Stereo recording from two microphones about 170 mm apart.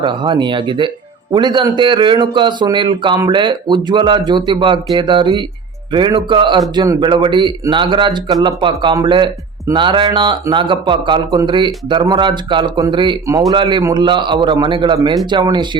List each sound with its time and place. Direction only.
0.0 s speech: 25° right (ahead or behind)